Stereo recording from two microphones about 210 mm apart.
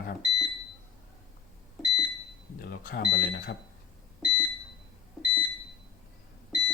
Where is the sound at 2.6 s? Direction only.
45° left (ahead or behind).